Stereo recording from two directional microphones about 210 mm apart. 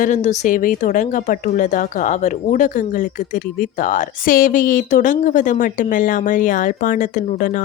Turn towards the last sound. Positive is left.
turn(degrees=40)  # may be behind; listen again after turning